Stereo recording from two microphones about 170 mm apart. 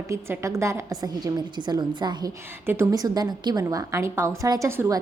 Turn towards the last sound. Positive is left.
turn(degrees=-15)  # may be behind; listen again after turning